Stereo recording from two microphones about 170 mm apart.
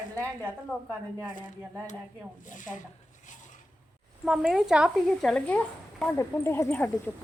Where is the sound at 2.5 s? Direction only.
50° left (ahead or behind).